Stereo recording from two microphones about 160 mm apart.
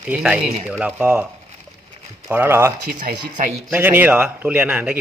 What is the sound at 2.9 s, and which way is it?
Speech, 70° right (ahead or behind).